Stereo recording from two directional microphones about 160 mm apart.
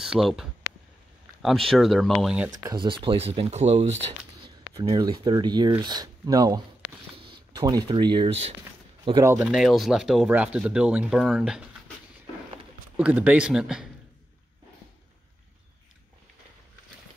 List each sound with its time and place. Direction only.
0.0 s speech: centre (ahead or behind)
2.5 s speech: 25° right (ahead or behind)
4.7 s speech: 25° right (ahead or behind)
9.2 s a man's voice: 15° right (ahead or behind)
9.5 s speech: centre (ahead or behind)
12.9 s a man's voice: 10° right (ahead or behind)